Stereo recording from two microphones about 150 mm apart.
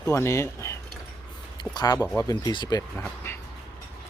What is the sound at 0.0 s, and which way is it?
Speech, 20° left (ahead or behind).